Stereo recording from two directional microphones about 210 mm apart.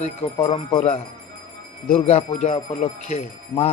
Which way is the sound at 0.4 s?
25° left (ahead or behind).